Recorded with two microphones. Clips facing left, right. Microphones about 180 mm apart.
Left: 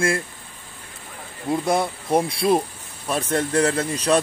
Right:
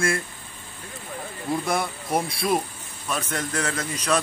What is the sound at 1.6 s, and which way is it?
A man's voice, 25° left (ahead or behind).